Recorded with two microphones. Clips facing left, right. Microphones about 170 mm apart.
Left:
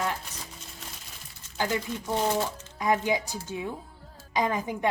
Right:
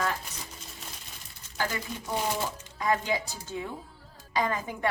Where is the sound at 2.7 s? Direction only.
15° left (ahead or behind).